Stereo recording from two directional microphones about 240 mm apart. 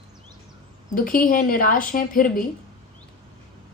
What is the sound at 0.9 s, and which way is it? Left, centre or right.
A woman's voice, left.